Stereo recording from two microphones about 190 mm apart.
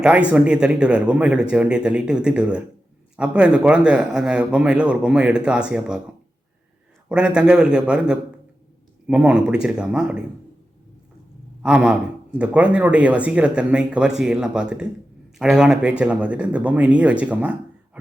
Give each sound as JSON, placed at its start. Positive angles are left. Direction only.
{"t": 0.3, "sound": "speech", "side_deg": -5}
{"t": 7.1, "sound": "speech", "side_deg": -5}
{"t": 11.6, "sound": "speech", "side_deg": -5}
{"t": 18.0, "sound": "a sound", "side_deg": -5}